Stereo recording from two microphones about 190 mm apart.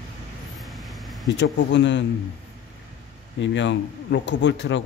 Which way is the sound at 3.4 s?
70° left (ahead or behind).